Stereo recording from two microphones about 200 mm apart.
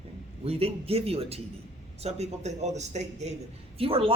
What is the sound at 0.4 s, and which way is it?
Speech, 30° right (ahead or behind).